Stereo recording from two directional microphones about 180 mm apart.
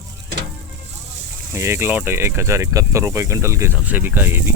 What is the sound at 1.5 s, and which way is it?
Speech, 15° right (ahead or behind).